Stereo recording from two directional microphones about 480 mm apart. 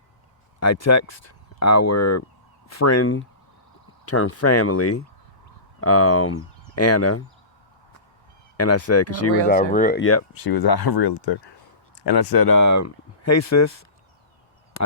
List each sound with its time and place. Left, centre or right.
0.6 s speech: left
8.5 s speech: left
9.5 s speech: centre
10.3 s speech: left